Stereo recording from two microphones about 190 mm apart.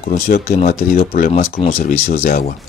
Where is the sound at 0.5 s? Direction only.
40° left (ahead or behind).